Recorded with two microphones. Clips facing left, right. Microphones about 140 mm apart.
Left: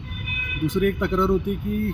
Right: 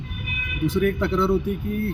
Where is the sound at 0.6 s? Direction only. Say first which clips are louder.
Even; 15° left (ahead or behind).